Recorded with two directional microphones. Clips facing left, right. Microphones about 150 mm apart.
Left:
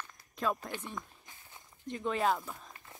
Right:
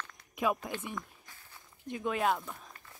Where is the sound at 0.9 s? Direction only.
20° left (ahead or behind).